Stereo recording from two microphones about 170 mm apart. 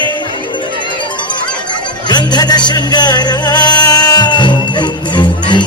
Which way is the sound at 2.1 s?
25° left (ahead or behind).